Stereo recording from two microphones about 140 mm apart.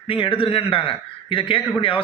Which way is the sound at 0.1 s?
40° left (ahead or behind).